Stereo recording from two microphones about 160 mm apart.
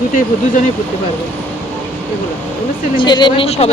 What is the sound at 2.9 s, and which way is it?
Speech, 25° left (ahead or behind).